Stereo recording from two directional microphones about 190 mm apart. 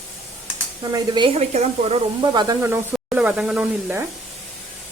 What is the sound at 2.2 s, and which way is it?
Speech, 20° right (ahead or behind).